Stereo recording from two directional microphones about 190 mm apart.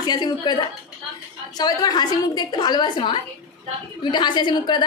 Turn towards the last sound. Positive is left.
turn(degrees=25)  # may be behind; listen again after turning